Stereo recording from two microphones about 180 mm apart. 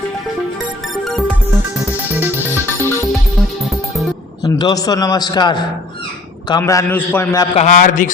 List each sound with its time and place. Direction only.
4.4 s a man's voice: 20° left (ahead or behind)
7.5 s a man's voice: 40° left (ahead or behind)